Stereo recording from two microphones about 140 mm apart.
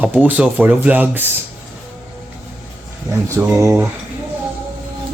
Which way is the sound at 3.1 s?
20° right (ahead or behind).